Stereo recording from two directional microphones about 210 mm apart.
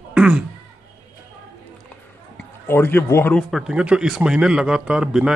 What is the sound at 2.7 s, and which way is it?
Speech, 10° left (ahead or behind).